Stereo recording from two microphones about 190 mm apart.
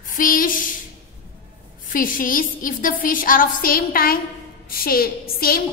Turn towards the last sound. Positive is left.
turn(degrees=50)  # may be behind; listen again after turning